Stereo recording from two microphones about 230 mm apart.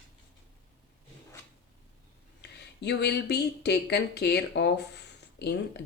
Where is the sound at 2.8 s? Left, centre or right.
Left.